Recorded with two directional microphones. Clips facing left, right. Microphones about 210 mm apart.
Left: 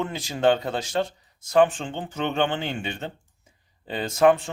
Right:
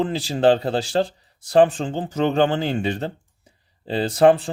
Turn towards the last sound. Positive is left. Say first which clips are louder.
# right 4 dB
turn(degrees=-35)  # may be behind; listen again after turning